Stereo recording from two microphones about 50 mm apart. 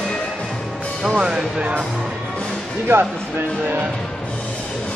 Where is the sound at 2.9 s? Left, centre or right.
Right.